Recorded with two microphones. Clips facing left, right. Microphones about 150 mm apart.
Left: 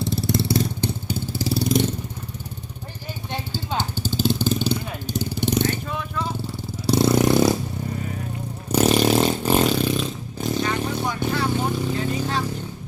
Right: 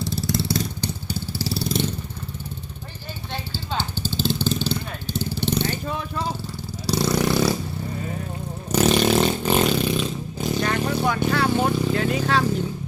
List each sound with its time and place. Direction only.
0.0 s vehicle: 25° left (ahead or behind)
3.5 s vehicle: 15° left (ahead or behind)
6.8 s vehicle: 25° left (ahead or behind)
8.7 s vehicle: 5° left (ahead or behind)
10.6 s vehicle: 65° right (ahead or behind)